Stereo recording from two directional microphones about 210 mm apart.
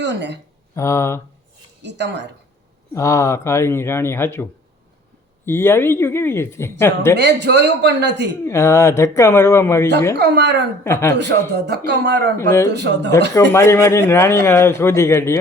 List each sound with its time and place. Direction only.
0.0 s speech: 55° right (ahead or behind)
0.8 s a man's voice: 15° left (ahead or behind)
1.8 s a man's voice: 55° right (ahead or behind)
2.9 s a man's voice: 15° left (ahead or behind)
5.5 s a man's voice: 10° left (ahead or behind)
7.2 s a man's voice: 55° right (ahead or behind)
8.4 s a man's voice: 15° left (ahead or behind)
10.2 s a man's voice: 55° right (ahead or behind)
10.8 s a man's voice: 10° left (ahead or behind)
11.5 s speech: 50° right (ahead or behind)
12.4 s a man's voice: 10° left (ahead or behind)
12.7 s a man's voice: 55° right (ahead or behind)
13.3 s a man's voice: 10° left (ahead or behind)